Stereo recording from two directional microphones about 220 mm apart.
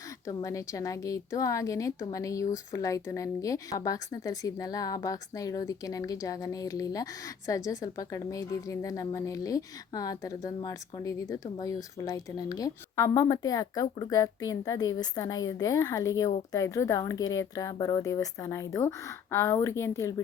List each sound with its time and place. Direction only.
0.3 s speech: 15° left (ahead or behind)